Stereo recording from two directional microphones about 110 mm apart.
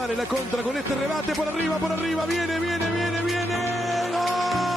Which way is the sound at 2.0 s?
Centre (ahead or behind).